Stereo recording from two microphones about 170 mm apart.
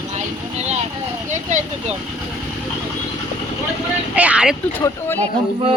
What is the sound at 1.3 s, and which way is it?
Vehicle, 45° right (ahead or behind).